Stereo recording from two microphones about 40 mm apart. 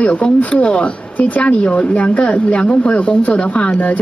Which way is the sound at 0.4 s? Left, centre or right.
Left.